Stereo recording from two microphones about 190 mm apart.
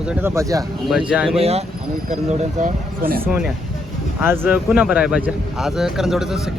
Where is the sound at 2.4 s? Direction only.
45° right (ahead or behind).